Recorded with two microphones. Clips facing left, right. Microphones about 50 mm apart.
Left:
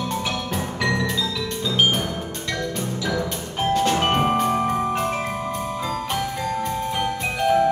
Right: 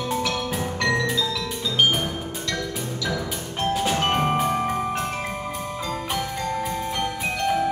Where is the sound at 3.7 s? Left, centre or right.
Centre.